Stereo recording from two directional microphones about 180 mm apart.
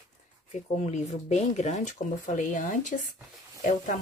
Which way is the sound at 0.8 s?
40° left (ahead or behind).